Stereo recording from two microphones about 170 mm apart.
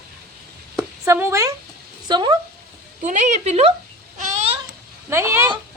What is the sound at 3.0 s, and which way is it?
Speech, 45° right (ahead or behind).